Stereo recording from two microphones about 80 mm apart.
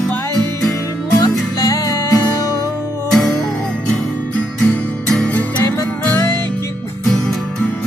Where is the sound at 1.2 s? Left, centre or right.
Left.